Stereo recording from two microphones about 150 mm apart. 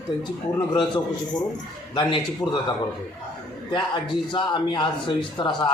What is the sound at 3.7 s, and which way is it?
A man's voice, 30° left (ahead or behind).